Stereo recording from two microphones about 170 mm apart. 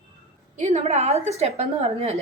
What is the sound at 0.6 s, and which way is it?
A woman's voice, 40° right (ahead or behind).